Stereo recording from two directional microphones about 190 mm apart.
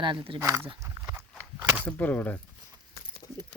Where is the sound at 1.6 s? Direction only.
10° right (ahead or behind).